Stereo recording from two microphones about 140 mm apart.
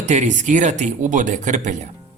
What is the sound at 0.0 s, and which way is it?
A man's voice, 55° right (ahead or behind).